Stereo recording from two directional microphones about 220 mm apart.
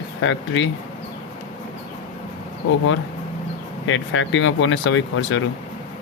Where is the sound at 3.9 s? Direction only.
60° left (ahead or behind).